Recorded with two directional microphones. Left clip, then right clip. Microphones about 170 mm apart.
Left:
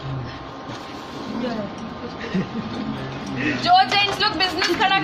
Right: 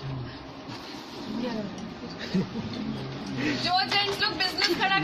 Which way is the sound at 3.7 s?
20° left (ahead or behind).